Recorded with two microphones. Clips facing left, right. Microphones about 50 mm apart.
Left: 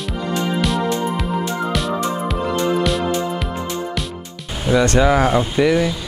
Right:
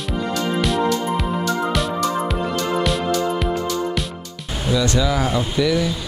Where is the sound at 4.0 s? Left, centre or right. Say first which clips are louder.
Even; centre.